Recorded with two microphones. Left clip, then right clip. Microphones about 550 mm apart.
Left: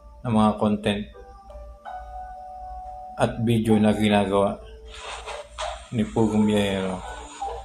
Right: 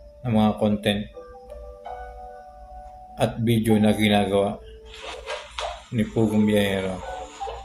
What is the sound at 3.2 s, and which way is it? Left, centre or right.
A man's voice, right.